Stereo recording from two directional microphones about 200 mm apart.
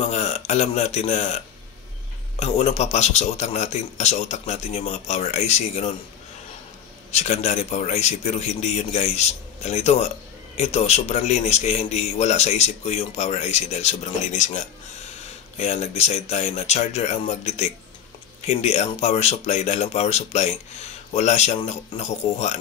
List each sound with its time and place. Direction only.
0.0 s a man's voice: 35° left (ahead or behind)
7.1 s a man's voice: 35° left (ahead or behind)